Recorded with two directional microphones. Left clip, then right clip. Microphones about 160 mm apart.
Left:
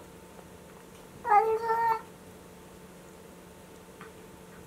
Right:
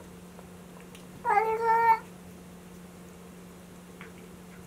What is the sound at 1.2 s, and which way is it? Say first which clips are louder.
Cat: left 1 dB; centre (ahead or behind).